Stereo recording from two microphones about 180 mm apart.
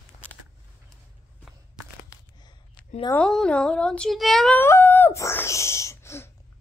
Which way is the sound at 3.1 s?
5° left (ahead or behind).